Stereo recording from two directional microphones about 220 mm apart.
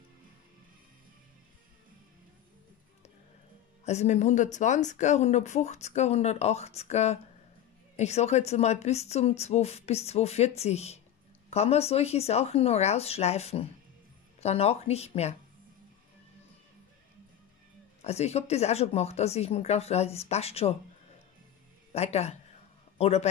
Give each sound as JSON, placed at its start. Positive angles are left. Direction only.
{"t": 3.8, "sound": "a woman's voice", "side_deg": 30}
{"t": 18.0, "sound": "a woman's voice", "side_deg": 30}
{"t": 21.9, "sound": "a woman's voice", "side_deg": 30}